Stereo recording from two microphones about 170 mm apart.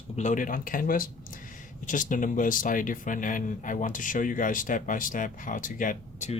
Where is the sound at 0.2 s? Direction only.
50° left (ahead or behind).